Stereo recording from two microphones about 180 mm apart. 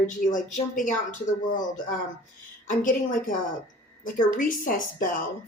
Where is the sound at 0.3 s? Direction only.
45° left (ahead or behind).